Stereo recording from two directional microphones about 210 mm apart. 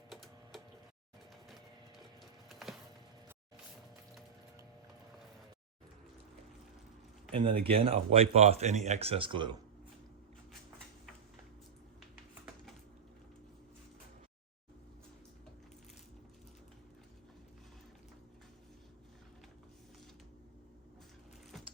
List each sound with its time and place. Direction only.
0.1 s tick-tock: centre (ahead or behind)
1.5 s clip-clop: centre (ahead or behind)
2.5 s music: centre (ahead or behind)
7.3 s speech: 25° right (ahead or behind)